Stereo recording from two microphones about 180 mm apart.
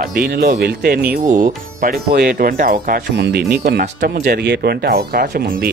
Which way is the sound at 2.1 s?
55° right (ahead or behind).